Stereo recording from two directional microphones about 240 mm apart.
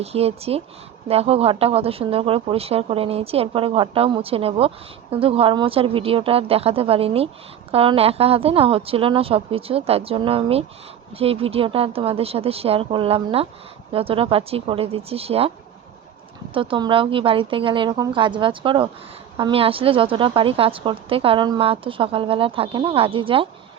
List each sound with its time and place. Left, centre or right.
0.0 s a woman's voice: right
16.6 s a woman's voice: centre